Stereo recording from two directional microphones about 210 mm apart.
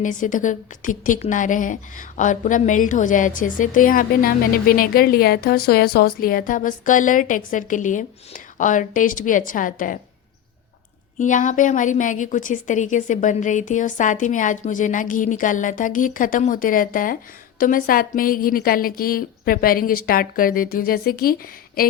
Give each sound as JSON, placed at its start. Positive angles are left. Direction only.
{"t": 0.0, "sound": "a woman's voice", "side_deg": 40}
{"t": 11.2, "sound": "a woman's voice", "side_deg": 35}